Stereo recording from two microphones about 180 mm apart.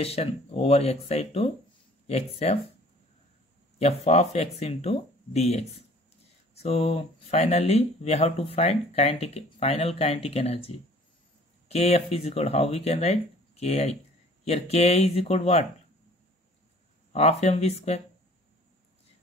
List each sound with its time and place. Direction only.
0.0 s speech: 35° left (ahead or behind)
3.8 s speech: 35° left (ahead or behind)
11.7 s speech: 35° left (ahead or behind)
17.1 s speech: 35° left (ahead or behind)